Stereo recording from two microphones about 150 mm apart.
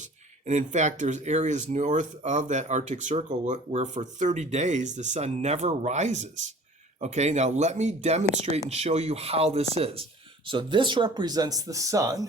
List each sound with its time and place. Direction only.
0.0 s speech: 55° right (ahead or behind); by 12.2 s 25° right (ahead or behind)